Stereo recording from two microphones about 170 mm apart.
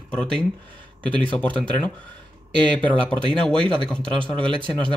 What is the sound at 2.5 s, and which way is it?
Speech, 30° right (ahead or behind).